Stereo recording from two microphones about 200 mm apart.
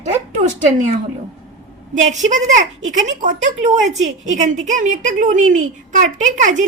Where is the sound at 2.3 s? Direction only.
40° right (ahead or behind).